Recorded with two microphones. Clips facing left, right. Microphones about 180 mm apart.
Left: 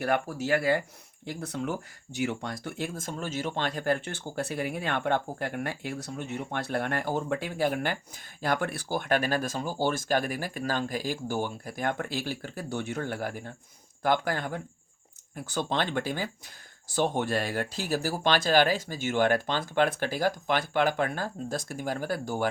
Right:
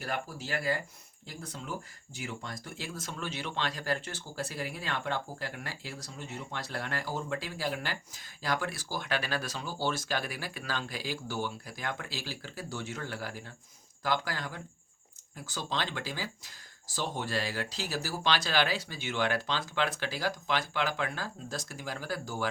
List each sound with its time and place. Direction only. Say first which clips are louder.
0.0 s speech: left 9 dB; 65° left (ahead or behind)